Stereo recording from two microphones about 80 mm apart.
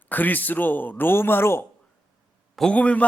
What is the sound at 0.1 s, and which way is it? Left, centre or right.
Speech, left.